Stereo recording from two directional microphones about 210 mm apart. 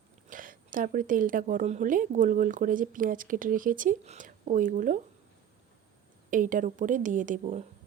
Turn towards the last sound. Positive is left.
turn(degrees=-35)  # may be behind; listen again after turning